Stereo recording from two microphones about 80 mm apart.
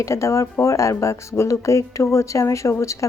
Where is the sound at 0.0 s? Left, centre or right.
Left.